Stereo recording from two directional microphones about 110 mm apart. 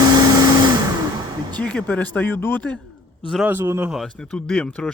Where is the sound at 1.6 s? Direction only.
10° left (ahead or behind).